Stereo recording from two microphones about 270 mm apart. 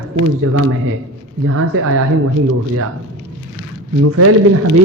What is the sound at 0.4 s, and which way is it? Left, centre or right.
A man's voice, right.